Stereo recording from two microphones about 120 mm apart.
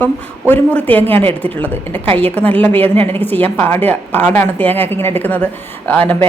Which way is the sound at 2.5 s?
15° left (ahead or behind).